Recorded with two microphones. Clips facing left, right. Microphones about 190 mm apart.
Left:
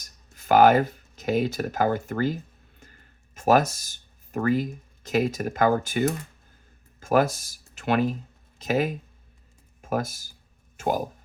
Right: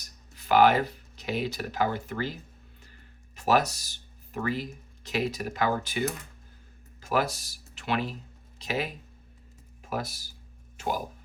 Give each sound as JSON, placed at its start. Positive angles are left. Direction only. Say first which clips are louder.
{"t": 0.0, "sound": "speech", "louder": "right 1 dB", "side_deg": 45}